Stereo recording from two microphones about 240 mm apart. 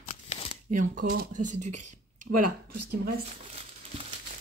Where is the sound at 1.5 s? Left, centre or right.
Right.